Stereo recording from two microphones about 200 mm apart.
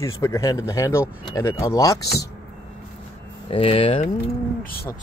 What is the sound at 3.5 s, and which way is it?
Speech, 25° left (ahead or behind).